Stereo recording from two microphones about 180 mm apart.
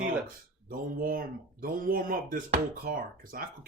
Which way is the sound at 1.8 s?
50° right (ahead or behind).